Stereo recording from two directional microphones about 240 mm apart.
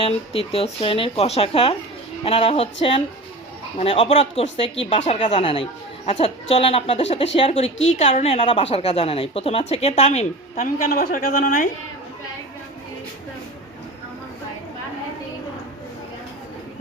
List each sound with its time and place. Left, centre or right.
0.0 s a woman's voice: left
3.8 s a woman's voice: left